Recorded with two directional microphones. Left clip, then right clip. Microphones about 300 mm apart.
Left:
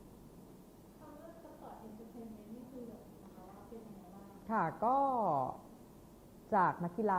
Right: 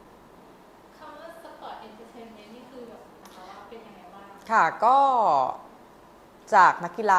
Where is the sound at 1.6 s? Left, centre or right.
Centre.